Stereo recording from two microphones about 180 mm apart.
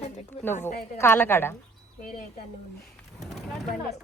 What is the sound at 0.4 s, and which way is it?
A woman's voice, 10° left (ahead or behind).